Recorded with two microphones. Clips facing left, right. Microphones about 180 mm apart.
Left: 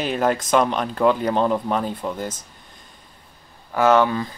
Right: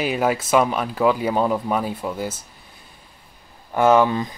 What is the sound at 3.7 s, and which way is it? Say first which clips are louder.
Speech: right 1 dB; 10° right (ahead or behind).